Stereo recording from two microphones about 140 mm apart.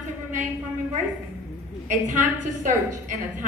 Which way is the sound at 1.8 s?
60° right (ahead or behind).